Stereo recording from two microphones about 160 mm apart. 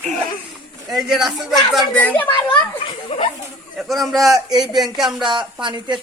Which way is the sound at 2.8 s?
35° left (ahead or behind).